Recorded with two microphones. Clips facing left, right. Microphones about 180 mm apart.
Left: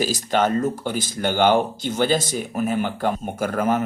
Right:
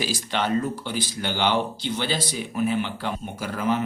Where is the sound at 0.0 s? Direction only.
45° left (ahead or behind).